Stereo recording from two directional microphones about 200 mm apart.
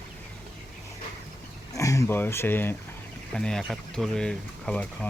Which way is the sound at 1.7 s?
15° left (ahead or behind).